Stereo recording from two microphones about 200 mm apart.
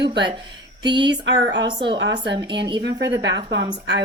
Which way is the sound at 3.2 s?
65° right (ahead or behind).